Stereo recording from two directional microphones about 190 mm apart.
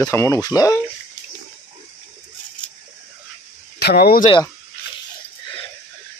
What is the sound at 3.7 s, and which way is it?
Speech, 55° left (ahead or behind).